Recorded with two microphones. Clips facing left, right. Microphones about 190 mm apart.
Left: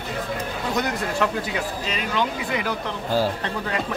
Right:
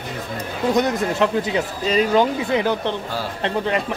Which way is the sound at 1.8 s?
35° right (ahead or behind).